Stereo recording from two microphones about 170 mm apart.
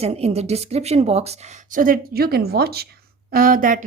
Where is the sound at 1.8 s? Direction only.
60° right (ahead or behind).